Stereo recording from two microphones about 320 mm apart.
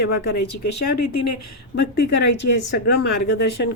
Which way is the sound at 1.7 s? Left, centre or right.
Left.